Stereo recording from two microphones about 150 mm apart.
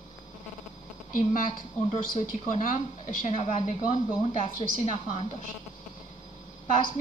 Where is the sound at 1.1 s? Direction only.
65° left (ahead or behind); by 4.5 s 45° left (ahead or behind).